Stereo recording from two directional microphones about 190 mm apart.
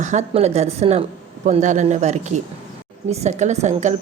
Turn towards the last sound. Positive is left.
turn(degrees=-35)  # may be behind; listen again after turning